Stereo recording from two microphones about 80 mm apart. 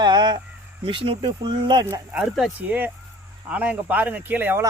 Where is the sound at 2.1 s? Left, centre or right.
Centre.